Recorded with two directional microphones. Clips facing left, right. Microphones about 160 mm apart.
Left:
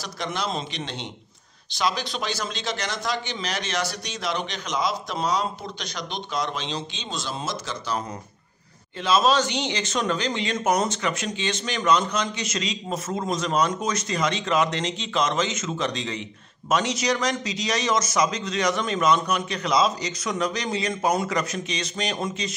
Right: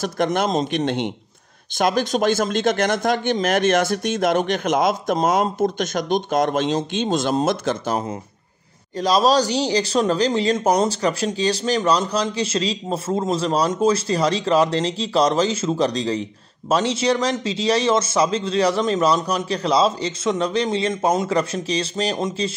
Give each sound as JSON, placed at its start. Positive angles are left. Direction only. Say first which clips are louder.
{"t": 0.0, "sound": "speech", "louder": "right 9 dB", "side_deg": -50}
{"t": 8.9, "sound": "speech", "louder": "right 4 dB", "side_deg": -40}